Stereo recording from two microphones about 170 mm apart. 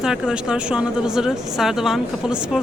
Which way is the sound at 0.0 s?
5° right (ahead or behind).